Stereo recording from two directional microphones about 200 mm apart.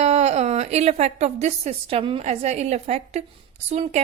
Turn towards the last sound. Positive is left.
turn(degrees=-35)  # may be behind; listen again after turning